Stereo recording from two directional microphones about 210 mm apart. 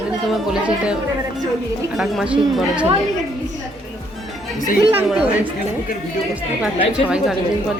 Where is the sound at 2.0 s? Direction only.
5° right (ahead or behind).